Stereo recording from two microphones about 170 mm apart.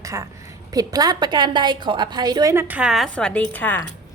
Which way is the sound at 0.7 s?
20° right (ahead or behind).